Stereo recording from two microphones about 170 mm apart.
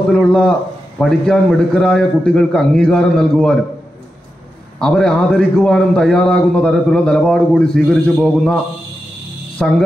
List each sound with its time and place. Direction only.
0.1 s a man's voice: 5° left (ahead or behind)
4.7 s a man's voice: 5° left (ahead or behind)
9.6 s a man's voice: 5° left (ahead or behind)